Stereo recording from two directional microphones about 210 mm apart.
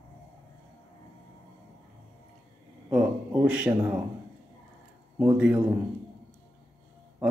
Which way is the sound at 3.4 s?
5° right (ahead or behind).